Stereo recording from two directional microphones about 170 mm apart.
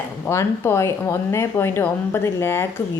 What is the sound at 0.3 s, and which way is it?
A woman's voice, 15° left (ahead or behind).